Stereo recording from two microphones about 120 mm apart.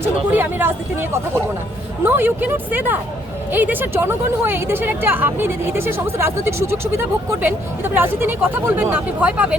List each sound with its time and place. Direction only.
0.0 s speech: 15° right (ahead or behind)
2.0 s speech: 15° right (ahead or behind)